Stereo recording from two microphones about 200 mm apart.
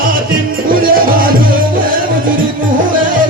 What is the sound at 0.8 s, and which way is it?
Music, 45° right (ahead or behind).